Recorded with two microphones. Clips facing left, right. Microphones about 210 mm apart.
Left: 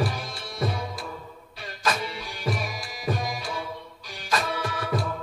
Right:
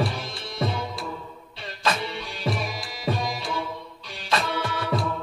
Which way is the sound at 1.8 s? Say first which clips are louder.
Right 1 dB; 25° right (ahead or behind).